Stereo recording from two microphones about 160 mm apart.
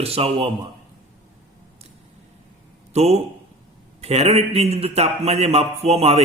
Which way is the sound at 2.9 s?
40° right (ahead or behind).